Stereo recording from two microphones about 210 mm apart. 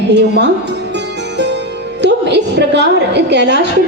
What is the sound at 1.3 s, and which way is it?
Music, 55° right (ahead or behind).